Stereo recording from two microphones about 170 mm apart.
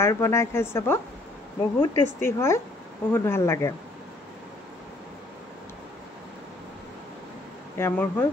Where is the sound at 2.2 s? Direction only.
15° left (ahead or behind).